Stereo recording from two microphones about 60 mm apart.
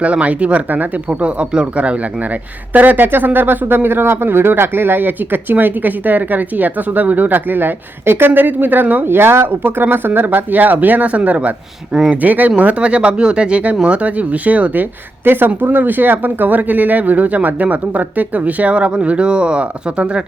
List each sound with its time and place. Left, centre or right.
0.0 s speech: right
2.7 s speech: right
15.2 s speech: right; by 20.2 s centre